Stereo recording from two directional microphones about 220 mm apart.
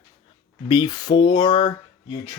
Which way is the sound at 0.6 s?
20° left (ahead or behind).